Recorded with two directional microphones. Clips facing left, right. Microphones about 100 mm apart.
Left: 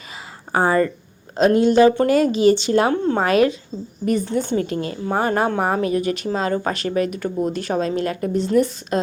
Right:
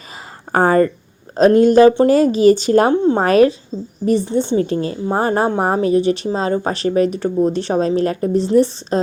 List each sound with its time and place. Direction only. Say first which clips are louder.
0.5 s speech: right 4 dB; 45° right (ahead or behind)
2.9 s speech: right 5 dB; 20° right (ahead or behind)
3.2 s speech: right 4 dB; 35° right (ahead or behind)